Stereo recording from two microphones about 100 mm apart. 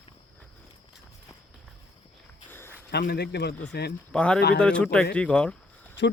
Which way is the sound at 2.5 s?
25° left (ahead or behind).